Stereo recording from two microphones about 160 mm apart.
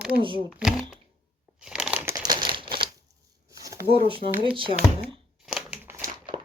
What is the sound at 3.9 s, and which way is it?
Speech, 35° right (ahead or behind).